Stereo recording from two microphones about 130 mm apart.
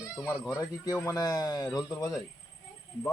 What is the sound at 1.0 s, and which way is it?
Speech, 25° left (ahead or behind).